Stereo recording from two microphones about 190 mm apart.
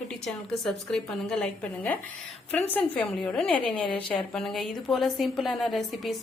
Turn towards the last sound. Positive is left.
turn(degrees=0)  # may be behind; listen again after turning